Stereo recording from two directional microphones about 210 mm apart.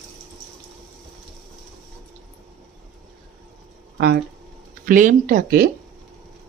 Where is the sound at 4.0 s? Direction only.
50° right (ahead or behind).